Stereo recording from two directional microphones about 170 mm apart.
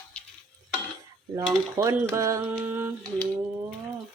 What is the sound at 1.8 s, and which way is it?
Speech, 15° right (ahead or behind).